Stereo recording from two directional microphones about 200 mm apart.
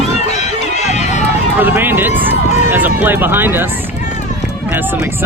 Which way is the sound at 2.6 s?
10° right (ahead or behind).